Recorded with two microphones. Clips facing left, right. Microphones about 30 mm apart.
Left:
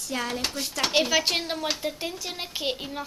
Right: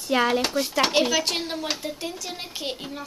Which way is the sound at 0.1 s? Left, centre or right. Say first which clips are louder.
Right 9 dB; right.